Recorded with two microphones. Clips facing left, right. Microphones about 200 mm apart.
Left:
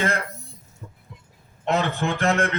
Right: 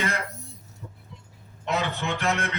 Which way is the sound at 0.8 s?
60° left (ahead or behind).